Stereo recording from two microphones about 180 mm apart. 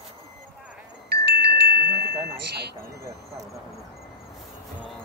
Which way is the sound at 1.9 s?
60° right (ahead or behind).